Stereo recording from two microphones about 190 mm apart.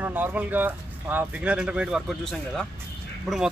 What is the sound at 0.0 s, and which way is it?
A man's voice, 10° right (ahead or behind).